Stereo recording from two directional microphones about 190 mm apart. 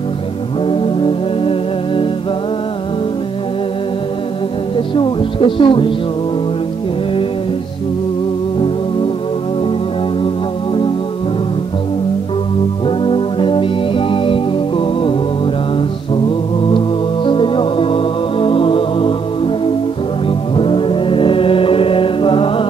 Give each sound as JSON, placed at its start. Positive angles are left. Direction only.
{"t": 0.7, "sound": "music", "side_deg": 30}
{"t": 4.7, "sound": "speech", "side_deg": 25}
{"t": 10.2, "sound": "music", "side_deg": 25}
{"t": 12.8, "sound": "music", "side_deg": 25}
{"t": 16.3, "sound": "music", "side_deg": 25}